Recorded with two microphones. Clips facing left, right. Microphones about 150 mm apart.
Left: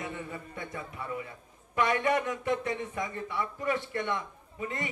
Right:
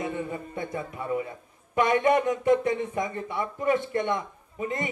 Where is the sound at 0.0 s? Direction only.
25° right (ahead or behind).